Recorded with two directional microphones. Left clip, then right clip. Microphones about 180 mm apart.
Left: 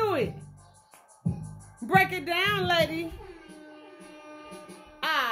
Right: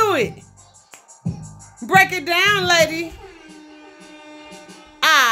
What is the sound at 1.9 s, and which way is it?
A woman's voice, 30° right (ahead or behind).